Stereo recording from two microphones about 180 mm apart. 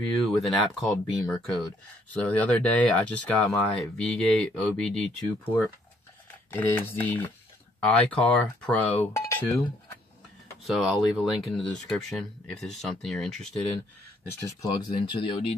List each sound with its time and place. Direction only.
0.0 s speech: centre (ahead or behind)
6.5 s speech: 10° left (ahead or behind)
10.6 s speech: centre (ahead or behind)
14.2 s speech: 15° left (ahead or behind)